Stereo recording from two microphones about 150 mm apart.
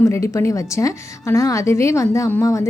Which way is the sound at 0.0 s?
20° left (ahead or behind).